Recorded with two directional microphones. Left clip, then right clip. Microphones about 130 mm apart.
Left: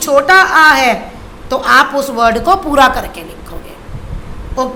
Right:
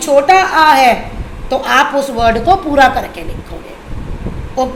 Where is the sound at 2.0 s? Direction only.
15° left (ahead or behind).